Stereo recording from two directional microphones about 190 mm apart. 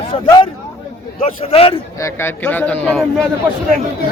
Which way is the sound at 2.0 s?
10° left (ahead or behind).